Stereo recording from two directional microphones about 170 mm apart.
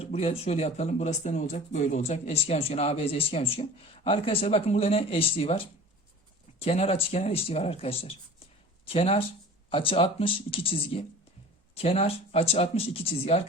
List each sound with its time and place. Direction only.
0.0 s speech: 40° left (ahead or behind)